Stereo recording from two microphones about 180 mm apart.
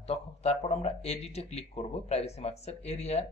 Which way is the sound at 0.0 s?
35° left (ahead or behind).